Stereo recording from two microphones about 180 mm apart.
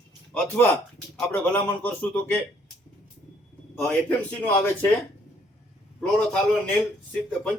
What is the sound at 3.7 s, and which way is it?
A man's voice, 10° left (ahead or behind).